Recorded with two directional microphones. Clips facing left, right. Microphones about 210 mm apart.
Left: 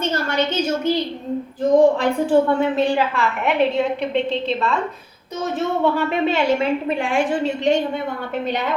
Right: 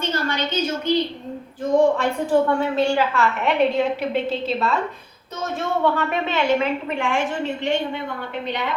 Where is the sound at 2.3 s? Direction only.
20° left (ahead or behind).